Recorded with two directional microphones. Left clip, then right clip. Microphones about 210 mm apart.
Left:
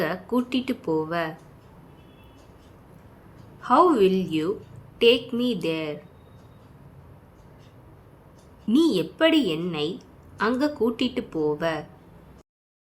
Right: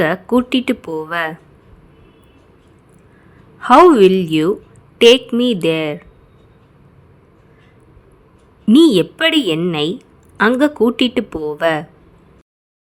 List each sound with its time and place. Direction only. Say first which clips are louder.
0.0 s speech: right 11 dB; 35° right (ahead or behind)
3.6 s speech: right 11 dB; 40° right (ahead or behind)
8.6 s speech: right 11 dB; 35° right (ahead or behind)